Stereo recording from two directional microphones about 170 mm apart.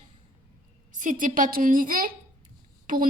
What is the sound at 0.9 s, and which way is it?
A woman's voice, 50° right (ahead or behind).